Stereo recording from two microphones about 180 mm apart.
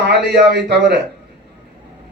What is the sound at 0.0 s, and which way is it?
A man's voice, 70° right (ahead or behind).